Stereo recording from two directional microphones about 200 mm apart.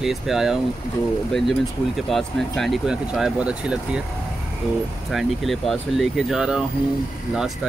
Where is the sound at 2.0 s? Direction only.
Centre (ahead or behind).